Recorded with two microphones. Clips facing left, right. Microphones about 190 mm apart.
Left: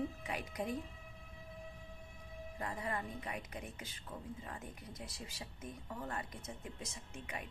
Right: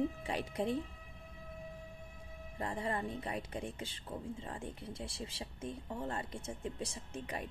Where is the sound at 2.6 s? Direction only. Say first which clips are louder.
Right 4 dB; 30° right (ahead or behind).